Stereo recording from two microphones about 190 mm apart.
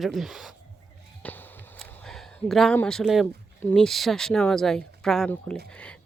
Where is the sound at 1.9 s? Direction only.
5° left (ahead or behind).